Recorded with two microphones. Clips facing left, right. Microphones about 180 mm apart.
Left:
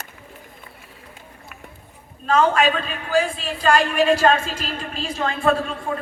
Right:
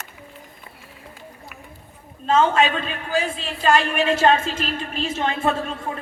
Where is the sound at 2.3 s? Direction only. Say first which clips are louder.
Even; 25° right (ahead or behind).